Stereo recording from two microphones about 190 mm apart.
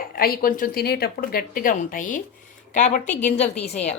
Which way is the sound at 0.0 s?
50° left (ahead or behind).